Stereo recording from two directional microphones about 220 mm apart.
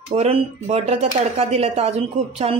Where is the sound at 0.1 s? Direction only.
30° right (ahead or behind).